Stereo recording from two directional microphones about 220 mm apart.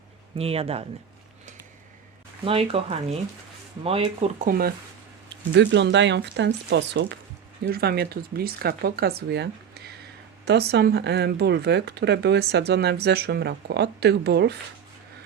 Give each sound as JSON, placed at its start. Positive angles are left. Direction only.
{"t": 0.3, "sound": "speech", "side_deg": -25}
{"t": 2.4, "sound": "speech", "side_deg": -25}
{"t": 5.5, "sound": "speech", "side_deg": -55}